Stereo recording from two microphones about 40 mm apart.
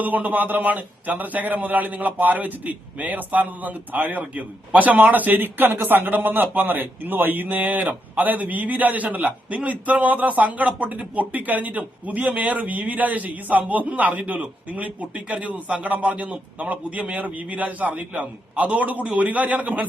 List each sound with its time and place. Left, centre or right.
0.0 s a man's voice: right